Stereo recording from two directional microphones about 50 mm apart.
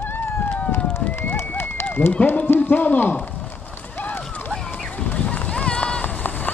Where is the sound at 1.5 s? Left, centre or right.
Left.